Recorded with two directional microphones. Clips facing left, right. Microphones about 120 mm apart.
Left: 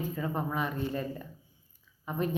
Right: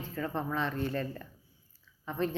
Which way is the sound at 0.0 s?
15° left (ahead or behind).